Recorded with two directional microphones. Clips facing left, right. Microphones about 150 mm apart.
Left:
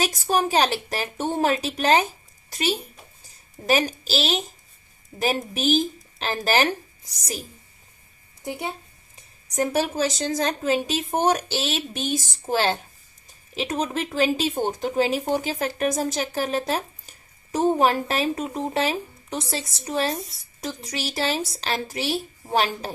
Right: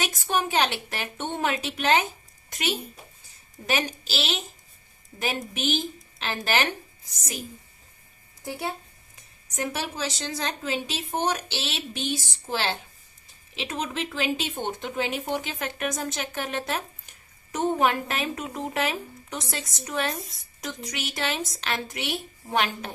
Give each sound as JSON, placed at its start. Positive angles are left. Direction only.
{"t": 0.0, "sound": "speech", "side_deg": 35}
{"t": 8.4, "sound": "speech", "side_deg": 20}
{"t": 9.5, "sound": "a woman's voice", "side_deg": 40}